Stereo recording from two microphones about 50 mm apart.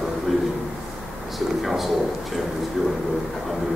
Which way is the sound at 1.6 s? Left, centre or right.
Centre.